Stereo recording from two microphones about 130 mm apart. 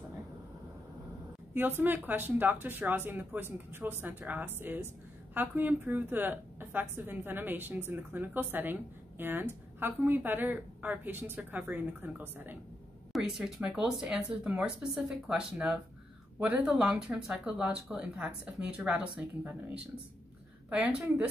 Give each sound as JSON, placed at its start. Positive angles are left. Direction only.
{"t": 1.5, "sound": "a woman's voice", "side_deg": -15}
{"t": 13.1, "sound": "a woman's voice", "side_deg": 0}